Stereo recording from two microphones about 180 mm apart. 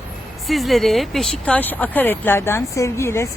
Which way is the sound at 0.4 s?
Centre (ahead or behind).